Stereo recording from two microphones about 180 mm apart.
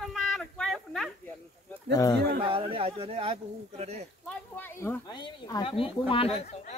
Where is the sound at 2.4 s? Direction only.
30° right (ahead or behind).